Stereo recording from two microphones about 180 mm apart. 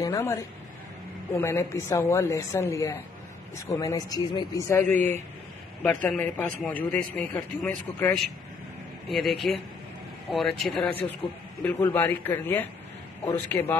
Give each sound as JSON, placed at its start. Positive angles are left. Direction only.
{"t": 0.0, "sound": "a woman's voice", "side_deg": 15}
{"t": 4.9, "sound": "speech", "side_deg": -40}
{"t": 5.8, "sound": "a woman's voice", "side_deg": 10}
{"t": 9.5, "sound": "a woman's voice", "side_deg": 0}